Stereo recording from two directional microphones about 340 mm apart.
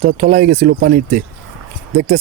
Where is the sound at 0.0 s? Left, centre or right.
Right.